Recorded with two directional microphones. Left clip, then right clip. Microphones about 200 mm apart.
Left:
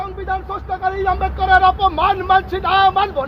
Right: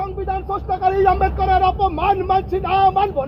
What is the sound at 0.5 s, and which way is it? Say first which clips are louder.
Speech: right 3 dB; 25° right (ahead or behind).